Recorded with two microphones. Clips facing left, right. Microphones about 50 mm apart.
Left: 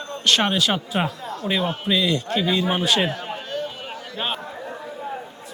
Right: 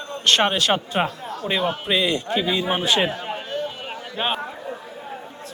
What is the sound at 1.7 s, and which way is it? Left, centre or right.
Speech, right.